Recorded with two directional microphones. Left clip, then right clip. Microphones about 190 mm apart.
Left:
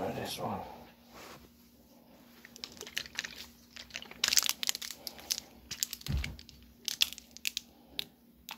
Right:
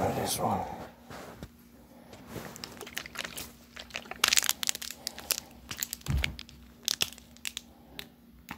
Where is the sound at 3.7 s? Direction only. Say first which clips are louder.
Right 5 dB; 10° right (ahead or behind).